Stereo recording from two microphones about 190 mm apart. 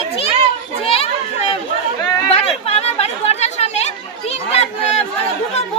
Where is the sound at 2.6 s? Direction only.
35° left (ahead or behind).